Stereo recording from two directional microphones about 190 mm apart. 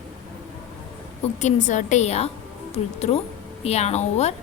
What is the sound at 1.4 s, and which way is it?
A woman's voice, 40° left (ahead or behind).